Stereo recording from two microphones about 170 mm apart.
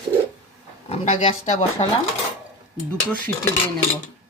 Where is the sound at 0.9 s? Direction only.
35° left (ahead or behind).